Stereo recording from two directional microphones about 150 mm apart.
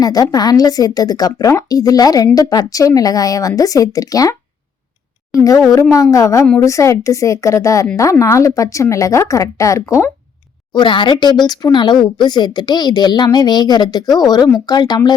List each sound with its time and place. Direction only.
0.0 s speech: 25° left (ahead or behind)
5.4 s speech: 20° left (ahead or behind)